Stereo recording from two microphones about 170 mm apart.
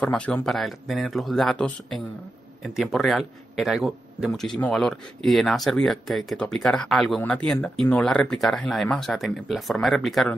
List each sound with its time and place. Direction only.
0.0 s a man's voice: 5° left (ahead or behind)